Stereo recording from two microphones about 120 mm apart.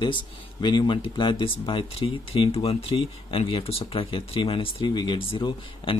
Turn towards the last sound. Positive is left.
turn(degrees=45)  # may be behind; listen again after turning